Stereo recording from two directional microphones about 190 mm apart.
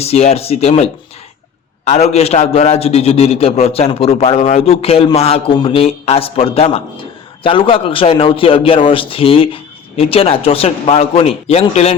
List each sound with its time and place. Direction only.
0.0 s a man's voice: 35° left (ahead or behind)